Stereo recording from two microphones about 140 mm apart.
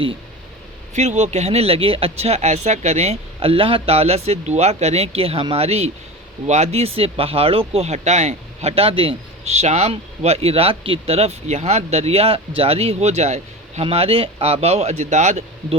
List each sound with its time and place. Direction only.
0.9 s speech: 55° right (ahead or behind)